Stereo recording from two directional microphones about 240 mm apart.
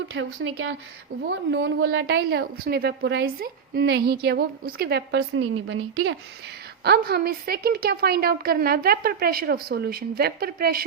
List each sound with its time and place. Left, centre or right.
0.1 s a woman's voice: right
6.8 s a woman's voice: right